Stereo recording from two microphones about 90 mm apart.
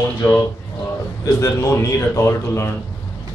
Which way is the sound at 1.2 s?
35° left (ahead or behind).